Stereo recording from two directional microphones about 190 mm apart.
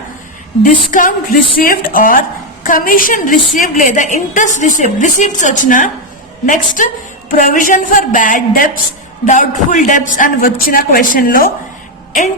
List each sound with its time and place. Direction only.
0.6 s a woman's voice: 45° left (ahead or behind)